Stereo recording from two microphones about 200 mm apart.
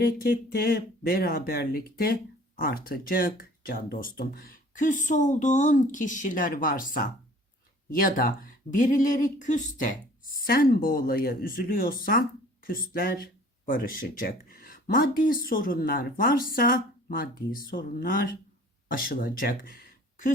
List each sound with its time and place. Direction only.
0.0 s speech: 50° left (ahead or behind)